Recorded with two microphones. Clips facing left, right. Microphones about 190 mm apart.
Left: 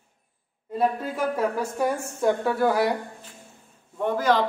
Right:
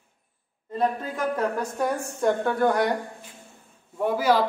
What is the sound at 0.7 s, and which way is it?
A woman's voice, 5° left (ahead or behind).